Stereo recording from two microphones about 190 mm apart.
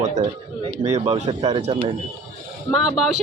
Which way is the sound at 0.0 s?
40° right (ahead or behind).